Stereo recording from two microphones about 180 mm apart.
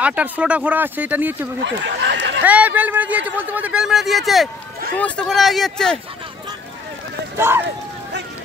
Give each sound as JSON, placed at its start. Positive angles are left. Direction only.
{"t": 0.0, "sound": "speech", "side_deg": -10}
{"t": 1.6, "sound": "speech", "side_deg": -80}
{"t": 2.4, "sound": "speech", "side_deg": -10}
{"t": 7.3, "sound": "speech", "side_deg": -15}